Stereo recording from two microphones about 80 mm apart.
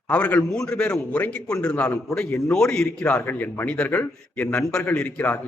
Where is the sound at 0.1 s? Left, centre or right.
Centre.